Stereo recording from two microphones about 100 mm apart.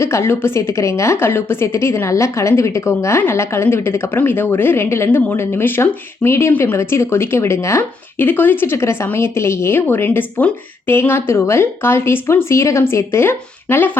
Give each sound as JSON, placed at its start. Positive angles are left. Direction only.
{"t": 0.0, "sound": "a woman's voice", "side_deg": 25}